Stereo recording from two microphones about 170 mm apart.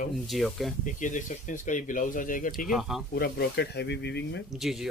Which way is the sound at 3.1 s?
70° left (ahead or behind).